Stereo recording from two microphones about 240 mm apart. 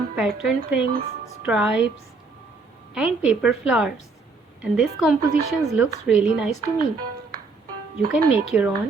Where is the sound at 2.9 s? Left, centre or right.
Centre.